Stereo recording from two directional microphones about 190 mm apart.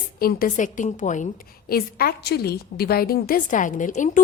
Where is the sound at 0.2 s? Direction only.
50° left (ahead or behind).